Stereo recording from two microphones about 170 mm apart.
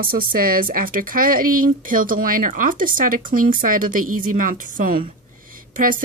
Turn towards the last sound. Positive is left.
turn(degrees=-55)  # may be behind; listen again after turning